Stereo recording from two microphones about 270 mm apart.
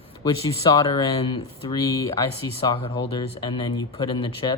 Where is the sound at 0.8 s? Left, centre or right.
Centre.